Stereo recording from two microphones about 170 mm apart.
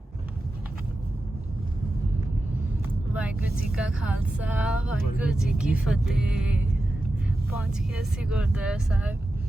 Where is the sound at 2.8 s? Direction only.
5° right (ahead or behind).